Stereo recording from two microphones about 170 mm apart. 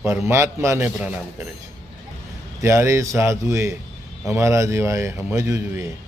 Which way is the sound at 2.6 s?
15° right (ahead or behind).